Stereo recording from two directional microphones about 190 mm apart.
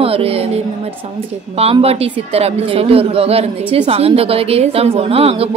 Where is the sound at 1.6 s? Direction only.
30° right (ahead or behind).